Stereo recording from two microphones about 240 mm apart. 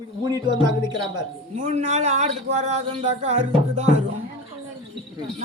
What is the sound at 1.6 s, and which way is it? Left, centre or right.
Speech, right.